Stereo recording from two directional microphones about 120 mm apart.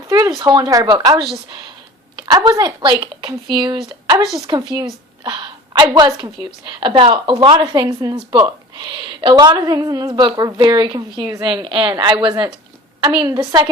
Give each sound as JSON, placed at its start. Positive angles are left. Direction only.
{"t": 0.1, "sound": "a woman's voice", "side_deg": -35}